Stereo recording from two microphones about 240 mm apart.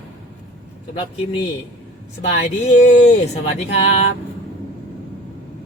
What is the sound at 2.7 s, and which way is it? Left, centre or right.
Speech, left.